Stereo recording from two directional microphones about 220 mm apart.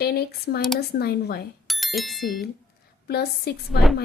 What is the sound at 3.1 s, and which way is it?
Speech, 45° left (ahead or behind).